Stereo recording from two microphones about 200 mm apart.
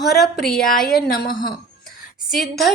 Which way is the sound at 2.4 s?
Centre (ahead or behind).